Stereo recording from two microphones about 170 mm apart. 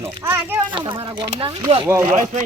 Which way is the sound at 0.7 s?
30° right (ahead or behind).